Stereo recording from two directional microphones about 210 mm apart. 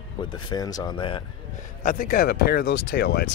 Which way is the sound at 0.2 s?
20° left (ahead or behind).